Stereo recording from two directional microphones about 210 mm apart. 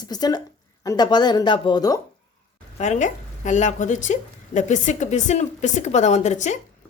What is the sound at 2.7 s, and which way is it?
Speech, 35° left (ahead or behind).